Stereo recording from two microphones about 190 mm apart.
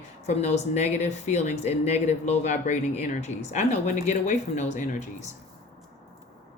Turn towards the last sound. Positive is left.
turn(degrees=40)  # may be behind; listen again after turning